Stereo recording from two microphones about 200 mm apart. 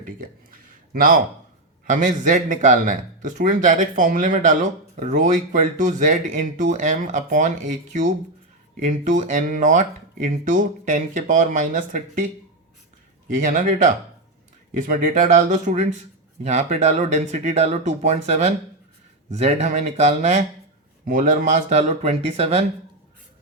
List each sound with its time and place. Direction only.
1.9 s speech: 40° right (ahead or behind)